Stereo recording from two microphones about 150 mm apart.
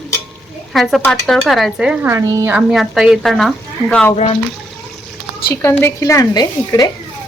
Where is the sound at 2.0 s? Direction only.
15° right (ahead or behind).